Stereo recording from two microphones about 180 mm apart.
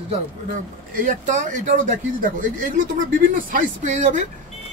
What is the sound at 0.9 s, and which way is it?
Speech, 45° right (ahead or behind).